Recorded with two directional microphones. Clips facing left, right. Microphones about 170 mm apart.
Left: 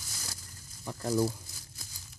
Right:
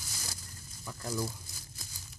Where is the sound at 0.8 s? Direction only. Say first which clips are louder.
Left 7 dB; 35° left (ahead or behind).